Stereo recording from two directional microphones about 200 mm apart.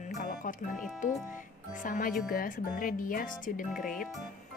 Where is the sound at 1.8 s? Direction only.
45° left (ahead or behind).